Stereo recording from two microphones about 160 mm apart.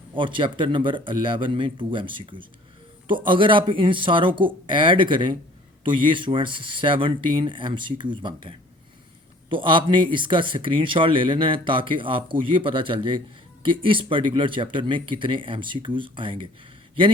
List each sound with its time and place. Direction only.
0.1 s speech: 30° right (ahead or behind)